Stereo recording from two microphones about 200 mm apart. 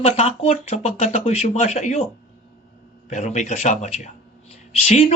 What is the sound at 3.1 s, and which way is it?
Speech, 35° left (ahead or behind).